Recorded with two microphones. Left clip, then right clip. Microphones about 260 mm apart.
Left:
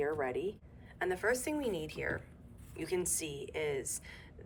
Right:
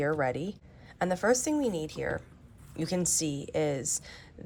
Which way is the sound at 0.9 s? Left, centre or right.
Centre.